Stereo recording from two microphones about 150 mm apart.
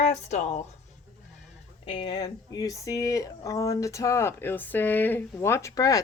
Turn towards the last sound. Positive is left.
turn(degrees=25)  # may be behind; listen again after turning